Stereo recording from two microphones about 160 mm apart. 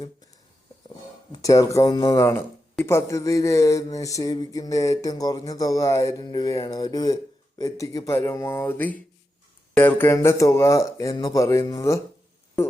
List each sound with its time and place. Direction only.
1.3 s speech: 20° left (ahead or behind)